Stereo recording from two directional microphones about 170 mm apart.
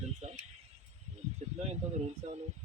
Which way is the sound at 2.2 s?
40° right (ahead or behind).